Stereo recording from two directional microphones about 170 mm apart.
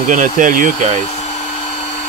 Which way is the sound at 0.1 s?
50° right (ahead or behind).